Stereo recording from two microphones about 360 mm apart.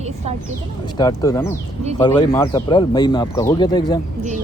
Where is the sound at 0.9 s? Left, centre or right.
Centre.